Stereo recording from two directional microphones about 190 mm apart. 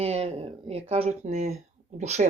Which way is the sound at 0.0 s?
30° right (ahead or behind).